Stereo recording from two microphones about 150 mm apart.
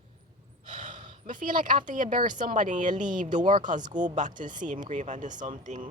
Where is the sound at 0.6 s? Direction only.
55° right (ahead or behind).